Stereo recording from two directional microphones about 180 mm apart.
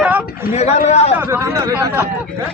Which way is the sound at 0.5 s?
35° left (ahead or behind).